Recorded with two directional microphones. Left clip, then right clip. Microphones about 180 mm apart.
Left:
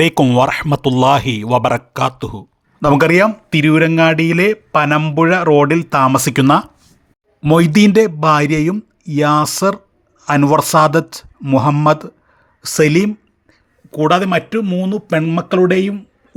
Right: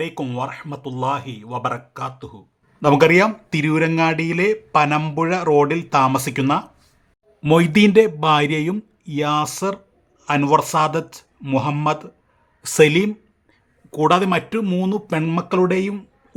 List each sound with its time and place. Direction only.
0.0 s speech: 55° left (ahead or behind)
2.8 s speech: 30° left (ahead or behind)
7.4 s speech: 20° left (ahead or behind)
12.6 s speech: 10° left (ahead or behind)
15.4 s speech: 15° left (ahead or behind)